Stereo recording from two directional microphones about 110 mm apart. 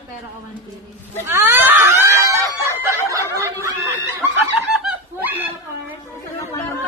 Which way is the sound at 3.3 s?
30° right (ahead or behind).